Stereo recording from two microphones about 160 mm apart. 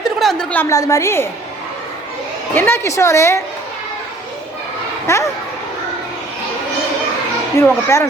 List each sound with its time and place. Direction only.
0.0 s a sound: centre (ahead or behind)
0.7 s a woman's voice: 20° left (ahead or behind)
2.6 s a woman's voice: 15° left (ahead or behind)
5.0 s a woman's voice: 15° left (ahead or behind)
7.6 s a woman's voice: 15° left (ahead or behind)